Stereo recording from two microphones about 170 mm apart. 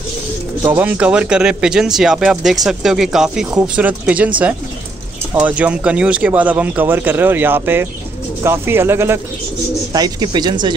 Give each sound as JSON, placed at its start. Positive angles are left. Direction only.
{"t": 0.7, "sound": "speech", "side_deg": -10}
{"t": 5.3, "sound": "speech", "side_deg": -10}